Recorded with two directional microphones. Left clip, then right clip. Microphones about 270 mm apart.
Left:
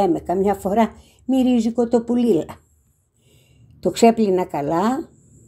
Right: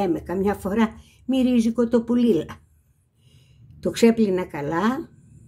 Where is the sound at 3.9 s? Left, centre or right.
Centre.